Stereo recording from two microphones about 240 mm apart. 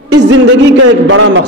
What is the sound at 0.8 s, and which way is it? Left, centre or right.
Speech, right.